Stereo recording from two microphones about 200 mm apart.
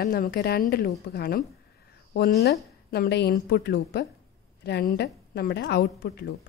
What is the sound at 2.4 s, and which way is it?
A woman's voice, 55° left (ahead or behind).